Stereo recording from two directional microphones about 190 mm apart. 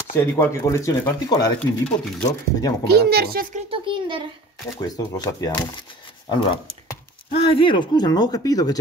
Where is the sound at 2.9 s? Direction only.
55° right (ahead or behind).